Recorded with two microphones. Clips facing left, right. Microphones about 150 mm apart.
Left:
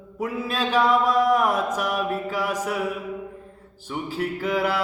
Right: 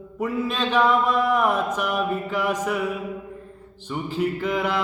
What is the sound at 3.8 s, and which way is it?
Mantra, 5° left (ahead or behind).